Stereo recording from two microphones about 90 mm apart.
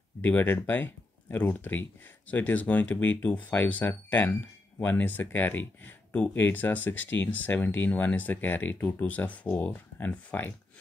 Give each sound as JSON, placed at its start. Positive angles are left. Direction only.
{"t": 0.2, "sound": "speech", "side_deg": 20}